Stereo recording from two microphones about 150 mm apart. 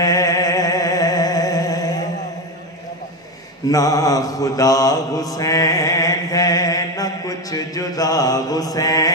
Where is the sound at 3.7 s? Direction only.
25° left (ahead or behind).